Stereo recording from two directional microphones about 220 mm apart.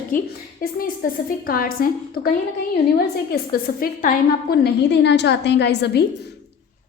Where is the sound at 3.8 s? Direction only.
45° left (ahead or behind).